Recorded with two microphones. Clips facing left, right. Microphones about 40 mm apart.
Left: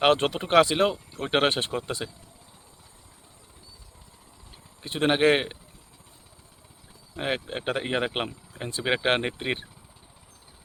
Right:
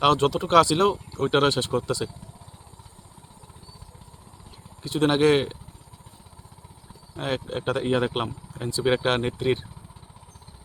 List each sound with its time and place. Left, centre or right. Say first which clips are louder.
0.0 s speech: right 2 dB; left
4.8 s speech: right 2 dB; left
7.2 s speech: right 1 dB; left